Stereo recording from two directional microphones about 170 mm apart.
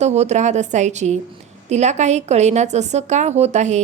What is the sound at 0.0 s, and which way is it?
A woman's voice, 40° right (ahead or behind).